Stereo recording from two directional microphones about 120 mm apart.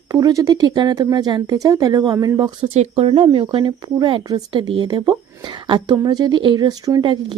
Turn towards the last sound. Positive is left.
turn(degrees=-40)  # may be behind; listen again after turning